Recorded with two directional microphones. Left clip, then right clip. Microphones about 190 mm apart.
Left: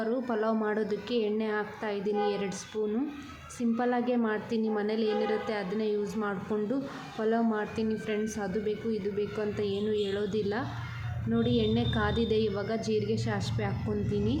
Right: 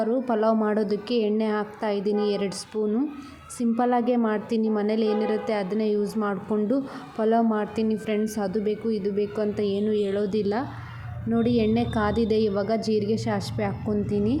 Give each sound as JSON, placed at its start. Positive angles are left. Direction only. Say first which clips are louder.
{"t": 0.0, "sound": "a woman's voice", "louder": "right 7 dB", "side_deg": -20}
{"t": 3.6, "sound": "a woman's voice", "louder": "right 6 dB", "side_deg": -20}